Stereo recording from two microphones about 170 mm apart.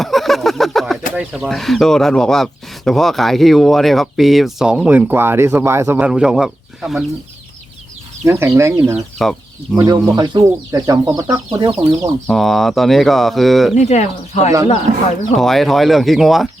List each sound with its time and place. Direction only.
0.0 s a sound: centre (ahead or behind)
1.1 s speech: 5° right (ahead or behind)
6.1 s speech: 5° right (ahead or behind)
8.2 s speech: 15° right (ahead or behind)
9.2 s speech: centre (ahead or behind)
9.7 s speech: 20° right (ahead or behind)
12.3 s speech: centre (ahead or behind)
13.7 s speech: 45° left (ahead or behind)
15.4 s speech: centre (ahead or behind)